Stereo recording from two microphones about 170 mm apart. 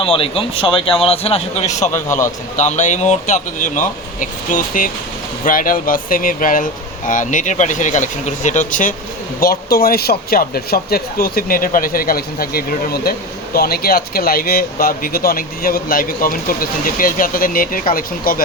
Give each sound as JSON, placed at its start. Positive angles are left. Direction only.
{"t": 0.0, "sound": "a man's voice", "side_deg": 35}
{"t": 2.0, "sound": "a man's voice", "side_deg": 15}
{"t": 2.6, "sound": "speech", "side_deg": 45}
{"t": 9.4, "sound": "speech", "side_deg": 60}